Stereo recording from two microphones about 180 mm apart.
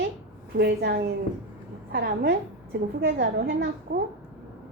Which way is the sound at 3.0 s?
75° right (ahead or behind).